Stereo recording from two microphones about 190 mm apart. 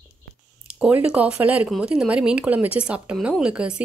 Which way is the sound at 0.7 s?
5° right (ahead or behind).